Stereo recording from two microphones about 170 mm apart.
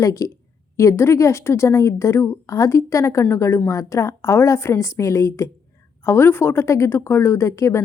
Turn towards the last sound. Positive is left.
turn(degrees=15)  # may be behind; listen again after turning